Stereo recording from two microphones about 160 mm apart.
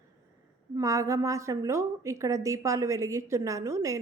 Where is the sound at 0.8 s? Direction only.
20° right (ahead or behind).